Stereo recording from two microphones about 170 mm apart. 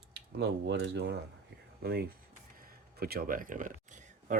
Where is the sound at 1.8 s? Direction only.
65° right (ahead or behind); by 4.4 s 45° right (ahead or behind).